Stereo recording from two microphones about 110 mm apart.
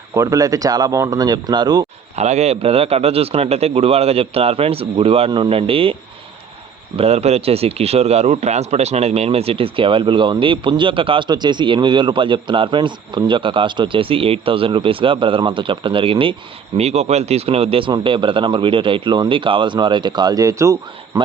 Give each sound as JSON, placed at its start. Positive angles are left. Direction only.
{"t": 0.1, "sound": "speech", "side_deg": -30}
{"t": 2.1, "sound": "a man's voice", "side_deg": -90}
{"t": 6.9, "sound": "speech", "side_deg": -75}
{"t": 16.7, "sound": "speech", "side_deg": -75}